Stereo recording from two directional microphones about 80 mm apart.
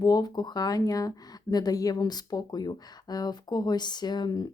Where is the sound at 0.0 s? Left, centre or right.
Left.